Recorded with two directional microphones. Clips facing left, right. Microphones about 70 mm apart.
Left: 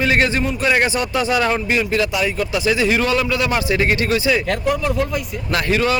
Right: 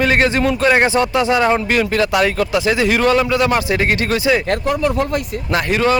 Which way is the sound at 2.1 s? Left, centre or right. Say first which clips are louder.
Right 5 dB; right.